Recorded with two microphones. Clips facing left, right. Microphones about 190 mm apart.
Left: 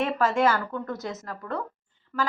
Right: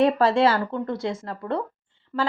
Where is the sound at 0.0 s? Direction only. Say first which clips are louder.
Right 5 dB; 35° right (ahead or behind).